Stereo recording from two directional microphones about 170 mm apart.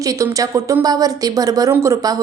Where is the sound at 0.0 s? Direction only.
20° right (ahead or behind).